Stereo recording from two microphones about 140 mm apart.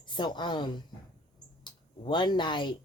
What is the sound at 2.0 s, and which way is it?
Speech, 35° left (ahead or behind).